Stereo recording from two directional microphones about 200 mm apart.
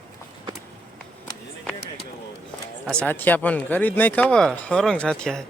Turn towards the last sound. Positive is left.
turn(degrees=5)  # may be behind; listen again after turning